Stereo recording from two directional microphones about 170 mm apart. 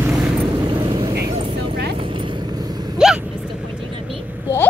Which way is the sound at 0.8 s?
25° right (ahead or behind).